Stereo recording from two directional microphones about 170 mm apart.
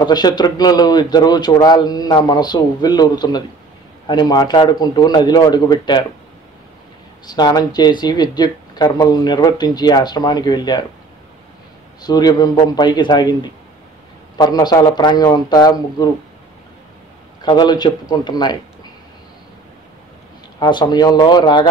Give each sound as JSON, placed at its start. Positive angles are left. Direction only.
{"t": 0.0, "sound": "speech", "side_deg": 25}
{"t": 7.2, "sound": "speech", "side_deg": 25}
{"t": 12.0, "sound": "speech", "side_deg": 25}
{"t": 17.4, "sound": "speech", "side_deg": 25}
{"t": 20.5, "sound": "speech", "side_deg": 25}